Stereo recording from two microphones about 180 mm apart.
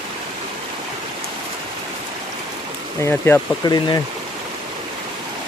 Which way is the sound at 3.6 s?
20° left (ahead or behind).